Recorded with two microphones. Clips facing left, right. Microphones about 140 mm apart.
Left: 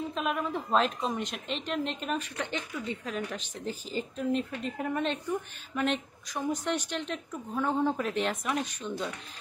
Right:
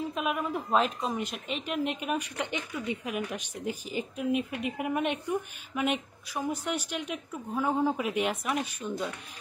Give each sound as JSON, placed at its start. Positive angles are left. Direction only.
{"t": 0.1, "sound": "a woman's voice", "side_deg": -5}